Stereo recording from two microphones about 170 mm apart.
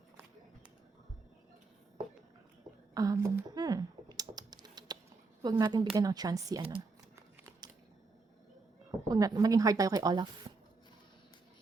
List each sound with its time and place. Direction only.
2.9 s typing: 20° right (ahead or behind)
5.4 s speech: 25° right (ahead or behind)
9.0 s speech: 20° right (ahead or behind)